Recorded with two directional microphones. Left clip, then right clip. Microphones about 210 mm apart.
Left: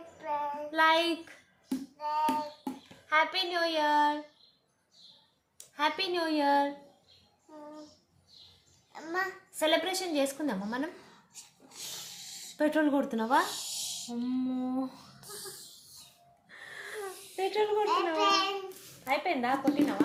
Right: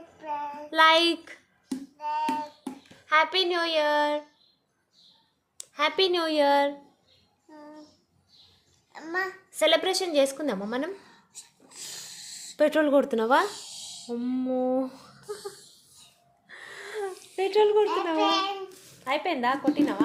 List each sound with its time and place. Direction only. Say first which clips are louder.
0.2 s child singing: even; 5° left (ahead or behind)
0.7 s a sound: right 6 dB; 55° right (ahead or behind)
2.0 s hands: right 2 dB; centre (ahead or behind)
3.1 s a woman's voice: right 5 dB; 55° right (ahead or behind)
5.5 s speech: right 6 dB; 55° right (ahead or behind)
8.9 s a child's voice: right 3 dB; 15° right (ahead or behind)
9.5 s a woman's voice: right 6 dB; 55° right (ahead or behind)
11.7 s wheeze: right 2 dB; 15° right (ahead or behind)
12.5 s a woman's voice: right 6 dB; 55° right (ahead or behind)
13.5 s music: left 3 dB; 25° left (ahead or behind)
14.1 s a woman's voice: right 8 dB; 50° right (ahead or behind)
16.5 s wheeze: right 3 dB; 50° right (ahead or behind)
17.8 s a child's voice: right 2 dB; centre (ahead or behind)
19.0 s a woman's voice: right 4 dB; 55° right (ahead or behind)